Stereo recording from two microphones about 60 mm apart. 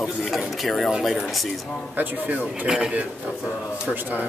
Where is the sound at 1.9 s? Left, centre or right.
Right.